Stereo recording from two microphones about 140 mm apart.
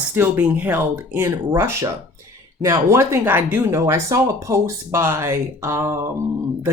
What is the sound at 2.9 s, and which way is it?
Speech, 15° right (ahead or behind).